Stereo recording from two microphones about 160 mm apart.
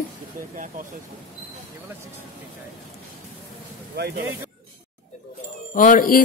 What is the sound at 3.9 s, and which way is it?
Speech, 90° right.